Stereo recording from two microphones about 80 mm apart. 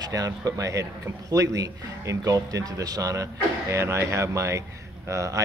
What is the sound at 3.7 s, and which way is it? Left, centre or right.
Speech, right.